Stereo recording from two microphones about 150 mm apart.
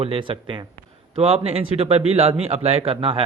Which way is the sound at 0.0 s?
35° right (ahead or behind).